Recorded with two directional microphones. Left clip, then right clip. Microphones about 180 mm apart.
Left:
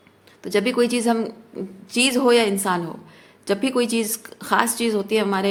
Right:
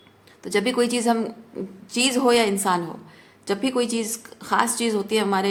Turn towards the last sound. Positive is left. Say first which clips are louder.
# left 1 dB
turn(degrees=15)  # may be behind; listen again after turning